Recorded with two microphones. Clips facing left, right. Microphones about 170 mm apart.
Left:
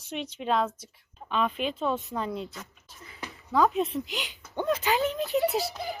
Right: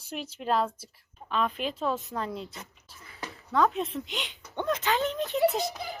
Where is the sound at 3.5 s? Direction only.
Centre (ahead or behind).